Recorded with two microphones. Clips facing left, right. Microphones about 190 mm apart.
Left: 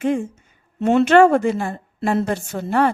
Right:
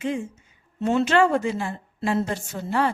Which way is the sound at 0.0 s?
55° left (ahead or behind).